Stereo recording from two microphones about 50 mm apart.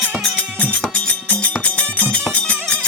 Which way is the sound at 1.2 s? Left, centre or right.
Left.